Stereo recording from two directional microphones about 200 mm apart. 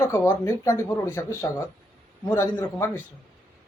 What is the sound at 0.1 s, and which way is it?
Speech, 15° left (ahead or behind).